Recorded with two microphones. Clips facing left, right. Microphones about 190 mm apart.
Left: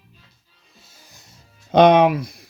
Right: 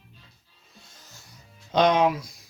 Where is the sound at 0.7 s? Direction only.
5° left (ahead or behind); by 1.4 s 20° left (ahead or behind).